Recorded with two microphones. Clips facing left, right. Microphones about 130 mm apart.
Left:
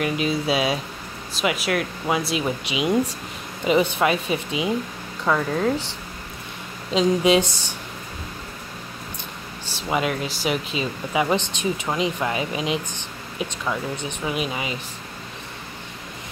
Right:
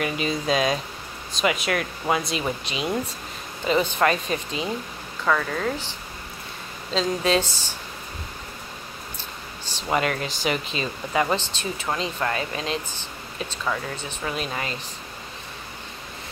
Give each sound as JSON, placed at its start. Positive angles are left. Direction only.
{"t": 0.0, "sound": "speech", "side_deg": 5}
{"t": 5.2, "sound": "speech", "side_deg": 25}
{"t": 6.9, "sound": "speech", "side_deg": 15}
{"t": 9.7, "sound": "speech", "side_deg": 5}